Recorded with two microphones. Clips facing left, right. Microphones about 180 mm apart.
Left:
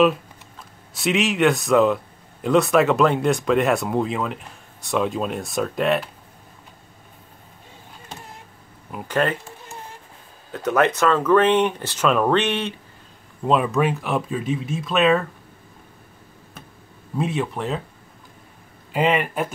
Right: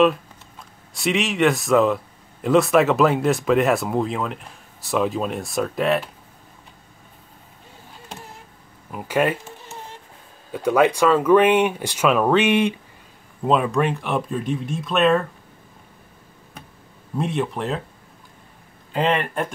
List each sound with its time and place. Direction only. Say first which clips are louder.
0.9 s speech: left 1 dB; centre (ahead or behind)
8.9 s speech: right 1 dB; 10° right (ahead or behind)
10.5 s speech: right 2 dB; 10° right (ahead or behind)
13.4 s speech: even; centre (ahead or behind)
17.2 s speech: even; centre (ahead or behind)
18.9 s speech: left 1 dB; 10° left (ahead or behind)